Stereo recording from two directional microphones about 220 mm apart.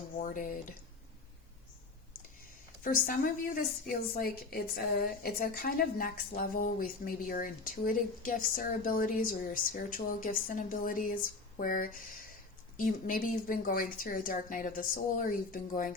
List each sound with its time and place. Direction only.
0.2 s speech: 40° left (ahead or behind)
2.8 s a woman's voice: 40° left (ahead or behind)